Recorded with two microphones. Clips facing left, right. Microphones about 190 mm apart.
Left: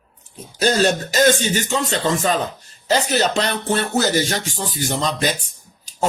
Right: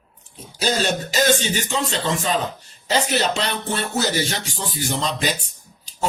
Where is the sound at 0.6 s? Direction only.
50° left (ahead or behind).